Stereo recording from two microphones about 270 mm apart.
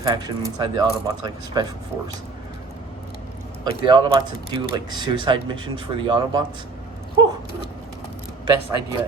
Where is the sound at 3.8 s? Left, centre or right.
Centre.